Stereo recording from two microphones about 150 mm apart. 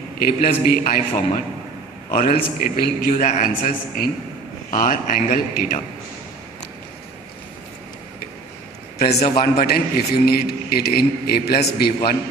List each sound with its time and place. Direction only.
0.2 s a man's voice: 70° left (ahead or behind)
8.9 s a sound: 90° left
9.4 s a man's voice: 90° left